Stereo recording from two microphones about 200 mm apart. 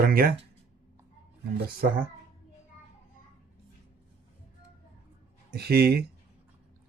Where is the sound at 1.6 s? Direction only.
50° right (ahead or behind).